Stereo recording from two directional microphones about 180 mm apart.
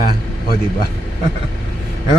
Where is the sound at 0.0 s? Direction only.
55° left (ahead or behind).